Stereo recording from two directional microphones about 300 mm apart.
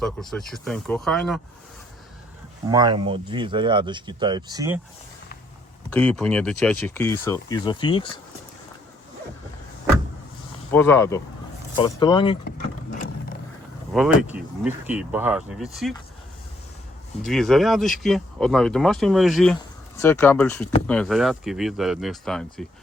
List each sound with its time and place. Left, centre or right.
0.0 s speech: centre
2.6 s speech: centre
5.9 s speech: centre
10.7 s speech: centre
12.5 s a sound: left
13.9 s speech: centre
17.2 s speech: centre